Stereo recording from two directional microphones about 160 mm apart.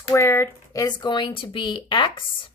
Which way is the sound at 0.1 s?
15° left (ahead or behind).